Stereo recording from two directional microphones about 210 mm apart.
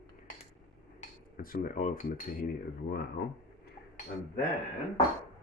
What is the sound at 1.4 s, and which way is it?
Speech, 40° left (ahead or behind).